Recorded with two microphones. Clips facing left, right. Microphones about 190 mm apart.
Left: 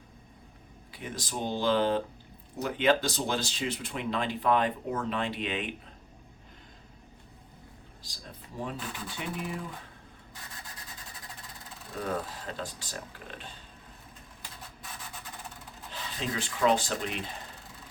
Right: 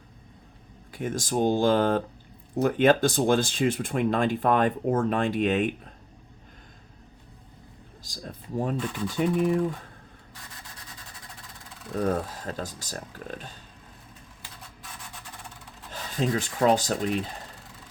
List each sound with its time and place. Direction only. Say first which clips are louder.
0.9 s speech: right 10 dB; 45° right (ahead or behind)
8.0 s speech: right 9 dB; 45° right (ahead or behind)
10.8 s rub: even; centre (ahead or behind)
11.9 s speech: right 7 dB; 45° right (ahead or behind)
15.9 s speech: right 8 dB; 45° right (ahead or behind)